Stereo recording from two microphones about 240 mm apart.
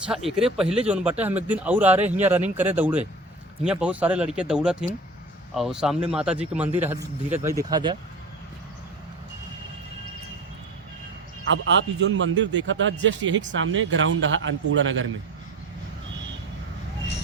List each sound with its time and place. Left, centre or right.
0.3 s a man's voice: centre
11.9 s speech: right